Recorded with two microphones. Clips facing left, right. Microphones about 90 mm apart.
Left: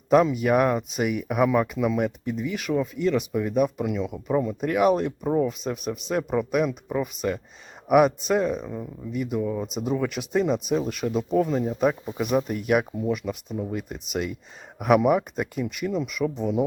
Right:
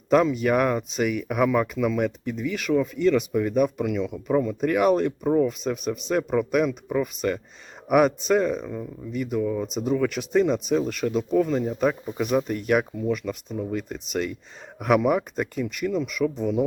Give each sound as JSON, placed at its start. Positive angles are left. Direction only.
{"t": 0.1, "sound": "speech", "side_deg": 5}
{"t": 9.4, "sound": "speech", "side_deg": 20}
{"t": 9.6, "sound": "speech", "side_deg": 0}